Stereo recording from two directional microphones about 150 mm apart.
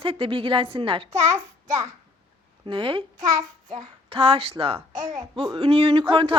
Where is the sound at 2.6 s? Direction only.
35° right (ahead or behind).